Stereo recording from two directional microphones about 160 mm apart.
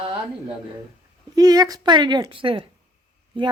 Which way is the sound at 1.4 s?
25° right (ahead or behind).